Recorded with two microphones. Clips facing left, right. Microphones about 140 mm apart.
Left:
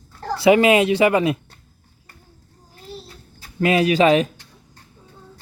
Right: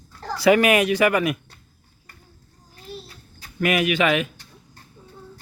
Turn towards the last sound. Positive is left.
turn(degrees=35)  # may be behind; listen again after turning